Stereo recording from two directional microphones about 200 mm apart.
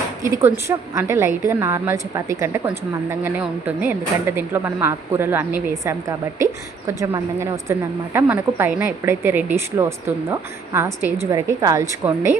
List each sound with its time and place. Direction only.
0.2 s a woman's voice: 15° right (ahead or behind)